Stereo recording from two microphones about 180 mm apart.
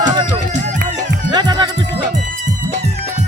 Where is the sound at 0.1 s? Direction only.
25° right (ahead or behind).